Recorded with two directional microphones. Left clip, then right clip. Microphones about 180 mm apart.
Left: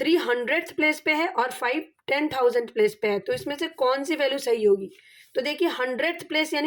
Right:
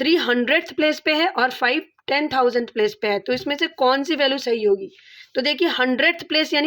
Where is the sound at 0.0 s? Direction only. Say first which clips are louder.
Right 4 dB; 25° right (ahead or behind).